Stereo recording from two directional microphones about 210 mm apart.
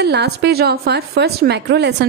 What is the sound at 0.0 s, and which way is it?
A woman's voice, 50° right (ahead or behind).